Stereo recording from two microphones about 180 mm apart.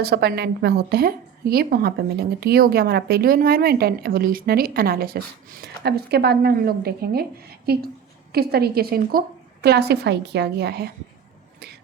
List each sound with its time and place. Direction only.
0.0 s a woman's voice: 60° right (ahead or behind)